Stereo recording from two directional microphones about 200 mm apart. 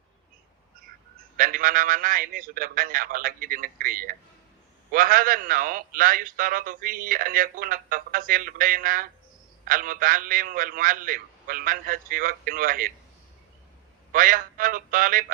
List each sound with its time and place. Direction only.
1.4 s a man's voice: 45° right (ahead or behind)
14.1 s a man's voice: 45° right (ahead or behind)